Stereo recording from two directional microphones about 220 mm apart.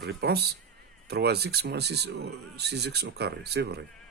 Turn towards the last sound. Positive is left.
turn(degrees=-50)  # may be behind; listen again after turning